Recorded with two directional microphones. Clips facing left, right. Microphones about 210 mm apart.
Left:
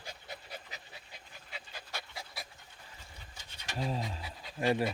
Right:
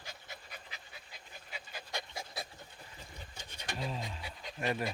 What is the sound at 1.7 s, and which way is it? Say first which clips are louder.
Dog: right 4 dB; 15° right (ahead or behind).